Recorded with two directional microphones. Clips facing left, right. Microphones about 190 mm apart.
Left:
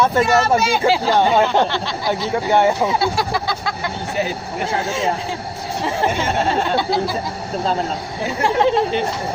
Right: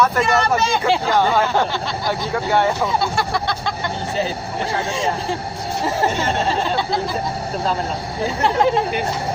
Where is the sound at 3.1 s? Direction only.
Centre (ahead or behind).